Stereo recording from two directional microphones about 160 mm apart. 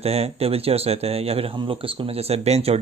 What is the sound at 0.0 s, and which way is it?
Speech, 40° right (ahead or behind).